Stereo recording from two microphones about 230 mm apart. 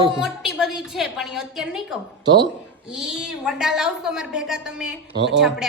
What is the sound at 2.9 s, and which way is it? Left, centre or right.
A woman's voice, centre.